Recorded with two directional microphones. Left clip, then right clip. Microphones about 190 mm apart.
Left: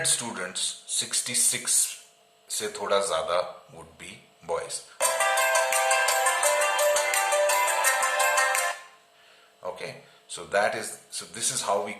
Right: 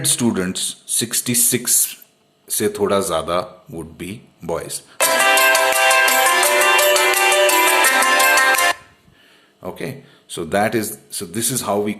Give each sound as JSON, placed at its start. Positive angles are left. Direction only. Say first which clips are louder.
{"t": 0.0, "sound": "speech", "louder": "right 9 dB", "side_deg": -45}
{"t": 3.9, "sound": "music", "louder": "right 11 dB", "side_deg": -45}
{"t": 9.6, "sound": "speech", "louder": "right 6 dB", "side_deg": -45}